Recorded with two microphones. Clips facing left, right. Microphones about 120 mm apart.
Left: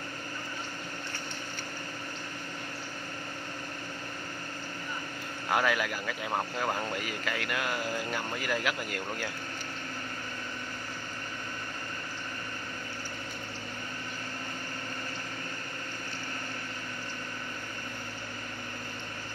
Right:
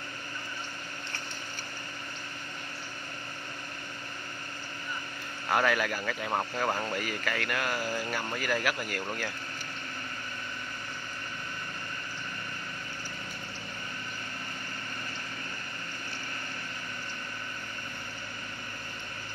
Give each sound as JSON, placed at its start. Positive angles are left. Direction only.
{"t": 5.5, "sound": "speech", "side_deg": 15}